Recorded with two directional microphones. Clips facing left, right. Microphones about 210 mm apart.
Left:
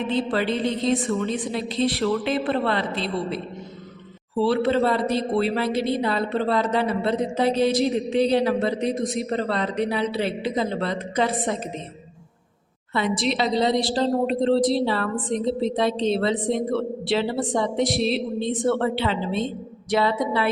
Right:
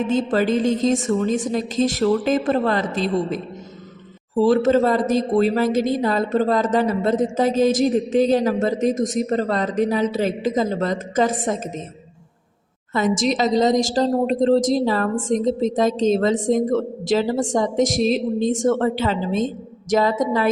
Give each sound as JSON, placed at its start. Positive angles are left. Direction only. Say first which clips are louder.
{"t": 0.0, "sound": "a woman's voice", "louder": "right 4 dB", "side_deg": -45}
{"t": 12.9, "sound": "a woman's voice", "louder": "right 4 dB", "side_deg": -45}